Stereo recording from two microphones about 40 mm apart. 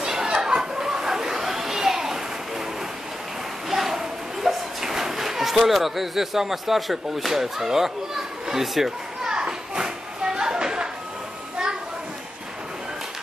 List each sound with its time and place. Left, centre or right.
0.0 s chatter: centre
3.7 s a sound: centre
5.7 s a child's voice: centre
9.3 s children playing: right